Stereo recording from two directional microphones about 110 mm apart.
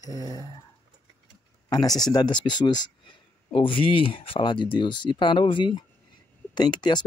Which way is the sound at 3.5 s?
55° left (ahead or behind).